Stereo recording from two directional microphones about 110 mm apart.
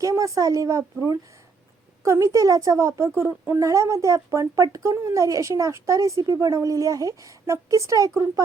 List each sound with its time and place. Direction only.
0.0 s a woman's voice: 30° right (ahead or behind)